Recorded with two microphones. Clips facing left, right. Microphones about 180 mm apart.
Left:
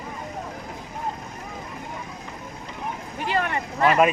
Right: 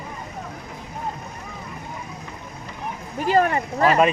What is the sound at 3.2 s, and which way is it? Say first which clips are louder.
Speech: right 7 dB; 40° right (ahead or behind).